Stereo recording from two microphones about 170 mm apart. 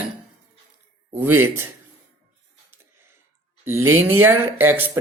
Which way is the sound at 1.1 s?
10° right (ahead or behind).